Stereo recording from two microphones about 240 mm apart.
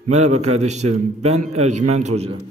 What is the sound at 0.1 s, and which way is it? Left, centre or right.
A man's voice, right.